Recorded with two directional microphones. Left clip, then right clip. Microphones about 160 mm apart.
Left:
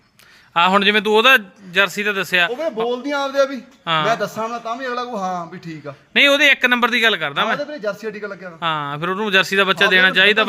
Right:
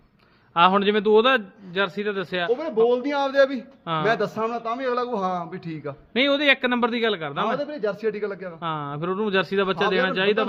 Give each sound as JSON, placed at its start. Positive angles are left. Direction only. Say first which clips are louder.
{"t": 0.5, "sound": "speech", "louder": "left 4 dB", "side_deg": 20}
{"t": 1.0, "sound": "speech", "louder": "left 5 dB", "side_deg": 5}
{"t": 2.9, "sound": "a man's voice", "louder": "left 1 dB", "side_deg": -30}
{"t": 6.1, "sound": "a man's voice", "louder": "left 7 dB", "side_deg": 5}
{"t": 7.7, "sound": "a man's voice", "louder": "left 1 dB", "side_deg": -30}
{"t": 8.6, "sound": "speech", "louder": "left 7 dB", "side_deg": 5}